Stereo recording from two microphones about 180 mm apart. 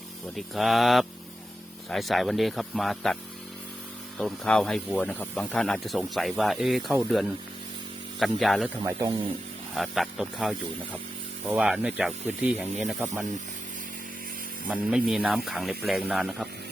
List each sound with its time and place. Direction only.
0.3 s speech: centre (ahead or behind)
4.2 s speech: 5° left (ahead or behind)
8.8 s a man's voice: 15° right (ahead or behind)
9.7 s speech: centre (ahead or behind)
14.7 s speech: 5° right (ahead or behind)